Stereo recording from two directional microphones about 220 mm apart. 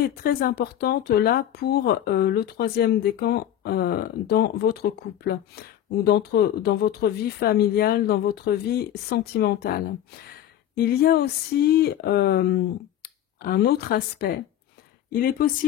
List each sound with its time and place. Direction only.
0.2 s speech: 40° left (ahead or behind)